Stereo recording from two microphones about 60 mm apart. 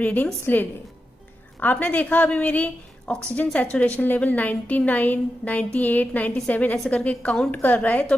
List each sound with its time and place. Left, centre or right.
0.0 s a woman's voice: left
1.6 s a woman's voice: left